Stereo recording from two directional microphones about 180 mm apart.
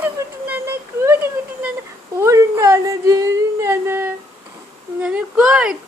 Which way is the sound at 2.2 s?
15° right (ahead or behind).